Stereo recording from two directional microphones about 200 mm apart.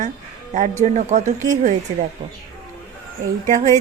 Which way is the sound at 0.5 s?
40° right (ahead or behind).